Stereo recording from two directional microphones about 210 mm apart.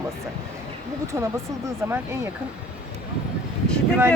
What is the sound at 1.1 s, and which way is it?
Speech, 15° right (ahead or behind).